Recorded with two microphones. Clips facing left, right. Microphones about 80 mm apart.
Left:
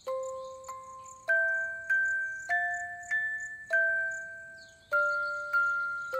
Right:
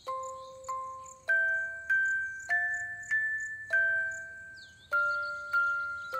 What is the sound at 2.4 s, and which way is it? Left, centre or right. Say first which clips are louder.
Music: left 1 dB; centre.